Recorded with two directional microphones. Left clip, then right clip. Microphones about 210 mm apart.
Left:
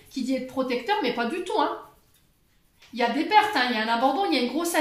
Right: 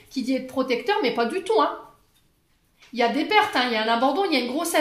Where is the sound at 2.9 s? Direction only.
45° right (ahead or behind).